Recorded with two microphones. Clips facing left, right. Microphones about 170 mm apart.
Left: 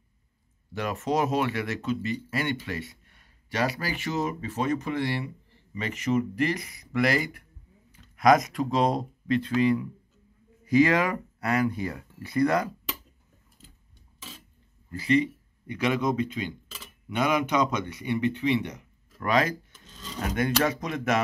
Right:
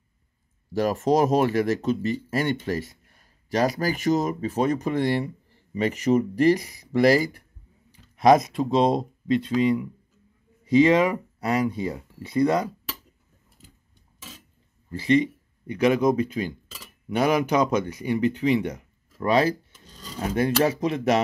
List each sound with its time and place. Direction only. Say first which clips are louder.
0.7 s speech: right 6 dB; 40° right (ahead or behind); by 12.6 s 20° right (ahead or behind)
14.9 s speech: right 3 dB; 35° right (ahead or behind)
19.1 s a sound: right 4 dB; 30° right (ahead or behind)
19.9 s filing: even; 10° right (ahead or behind)
20.2 s speech: right 4 dB; 30° right (ahead or behind)